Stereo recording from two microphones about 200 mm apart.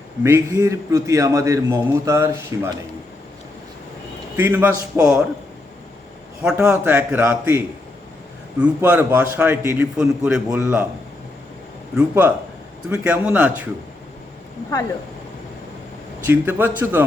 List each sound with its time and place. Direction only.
0.2 s a man's voice: 10° right (ahead or behind)
4.4 s a man's voice: 10° right (ahead or behind)
6.4 s a man's voice: 5° right (ahead or behind)
8.6 s a man's voice: 10° right (ahead or behind)
11.9 s a man's voice: 10° right (ahead or behind)
16.2 s a man's voice: 10° right (ahead or behind)